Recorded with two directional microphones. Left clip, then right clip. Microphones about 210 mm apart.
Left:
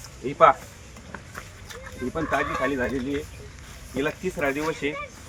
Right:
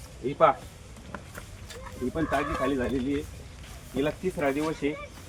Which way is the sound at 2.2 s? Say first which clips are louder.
Left 3 dB; 20° left (ahead or behind).